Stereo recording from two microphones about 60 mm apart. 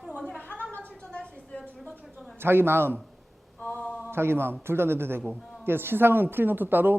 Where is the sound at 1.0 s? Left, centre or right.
Centre.